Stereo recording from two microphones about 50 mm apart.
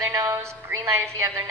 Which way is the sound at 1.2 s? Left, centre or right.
Right.